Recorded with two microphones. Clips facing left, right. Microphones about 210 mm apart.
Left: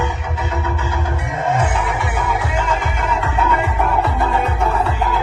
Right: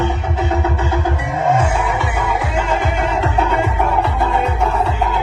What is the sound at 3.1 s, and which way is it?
Music, 30° right (ahead or behind).